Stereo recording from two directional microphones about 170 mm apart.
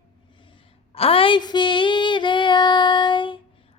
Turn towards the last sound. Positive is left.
turn(degrees=30)  # may be behind; listen again after turning